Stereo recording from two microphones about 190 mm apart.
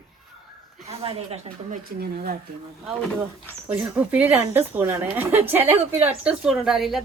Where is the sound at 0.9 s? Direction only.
30° right (ahead or behind).